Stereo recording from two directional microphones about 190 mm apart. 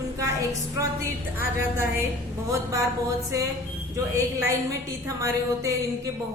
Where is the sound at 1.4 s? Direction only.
10° right (ahead or behind).